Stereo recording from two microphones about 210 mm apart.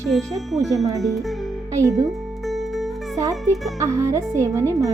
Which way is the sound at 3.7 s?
15° right (ahead or behind).